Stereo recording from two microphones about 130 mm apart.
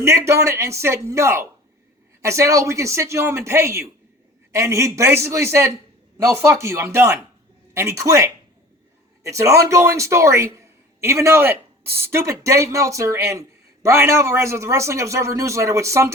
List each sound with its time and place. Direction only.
0.0 s a man's voice: 20° right (ahead or behind)